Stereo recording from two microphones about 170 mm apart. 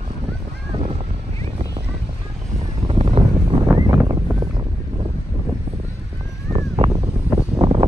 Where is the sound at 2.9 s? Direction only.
35° right (ahead or behind).